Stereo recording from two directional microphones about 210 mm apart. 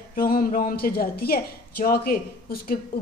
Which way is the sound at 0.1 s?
45° left (ahead or behind).